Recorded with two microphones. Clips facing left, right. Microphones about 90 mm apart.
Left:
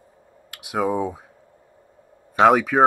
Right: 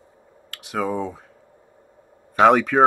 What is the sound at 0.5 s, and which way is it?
Speech, 10° left (ahead or behind).